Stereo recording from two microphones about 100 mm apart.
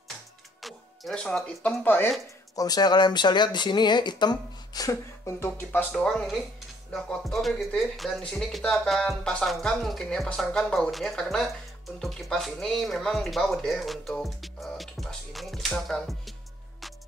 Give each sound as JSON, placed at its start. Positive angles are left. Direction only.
{"t": 0.6, "sound": "music", "side_deg": 0}
{"t": 1.1, "sound": "speech", "side_deg": 10}
{"t": 2.5, "sound": "speech", "side_deg": 40}
{"t": 5.9, "sound": "speech", "side_deg": 5}
{"t": 16.8, "sound": "music", "side_deg": 0}